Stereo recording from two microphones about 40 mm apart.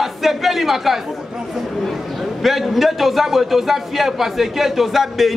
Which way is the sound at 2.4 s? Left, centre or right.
Centre.